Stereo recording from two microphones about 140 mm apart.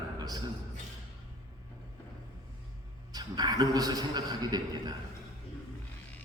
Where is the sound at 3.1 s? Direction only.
30° right (ahead or behind).